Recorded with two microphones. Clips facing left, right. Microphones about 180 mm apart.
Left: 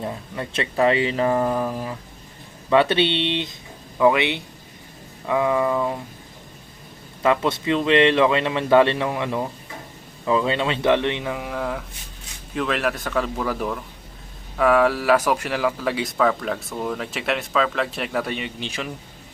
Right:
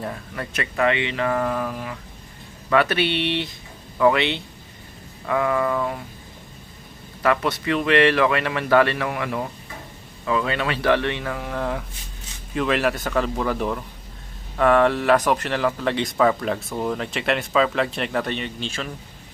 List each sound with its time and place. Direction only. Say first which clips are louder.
0.0 s speech: left 1 dB; 20° left (ahead or behind)
3.9 s a sound: left 1 dB; 15° left (ahead or behind)
7.2 s speech: left 1 dB; 20° left (ahead or behind)